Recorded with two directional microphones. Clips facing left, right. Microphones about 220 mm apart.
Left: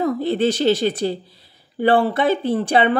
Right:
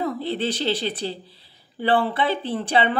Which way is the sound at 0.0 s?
45° left (ahead or behind).